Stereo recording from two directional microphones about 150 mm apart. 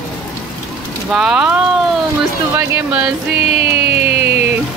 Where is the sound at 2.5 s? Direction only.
10° right (ahead or behind).